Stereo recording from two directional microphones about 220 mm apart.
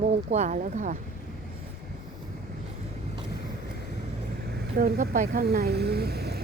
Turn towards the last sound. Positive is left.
turn(degrees=-45)  # may be behind; listen again after turning